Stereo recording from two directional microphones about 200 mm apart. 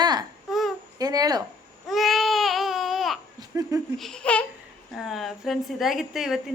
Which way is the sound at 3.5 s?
15° right (ahead or behind).